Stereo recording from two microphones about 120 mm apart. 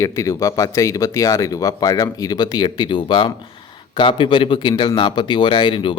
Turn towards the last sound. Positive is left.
turn(degrees=45)  # may be behind; listen again after turning